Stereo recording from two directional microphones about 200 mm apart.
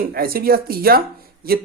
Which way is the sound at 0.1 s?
50° right (ahead or behind).